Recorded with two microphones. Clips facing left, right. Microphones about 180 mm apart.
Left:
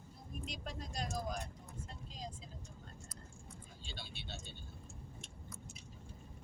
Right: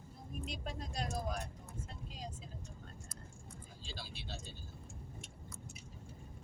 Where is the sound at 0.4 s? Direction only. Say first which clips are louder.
Right 2 dB; centre (ahead or behind).